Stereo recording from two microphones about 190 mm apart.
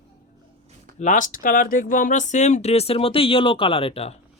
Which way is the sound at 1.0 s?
40° left (ahead or behind).